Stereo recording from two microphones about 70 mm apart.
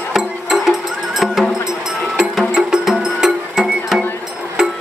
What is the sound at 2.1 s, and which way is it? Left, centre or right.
Music, centre.